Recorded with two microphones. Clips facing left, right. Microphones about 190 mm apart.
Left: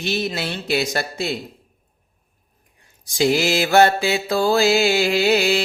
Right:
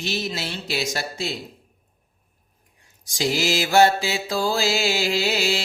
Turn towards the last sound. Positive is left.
turn(degrees=55)  # may be behind; listen again after turning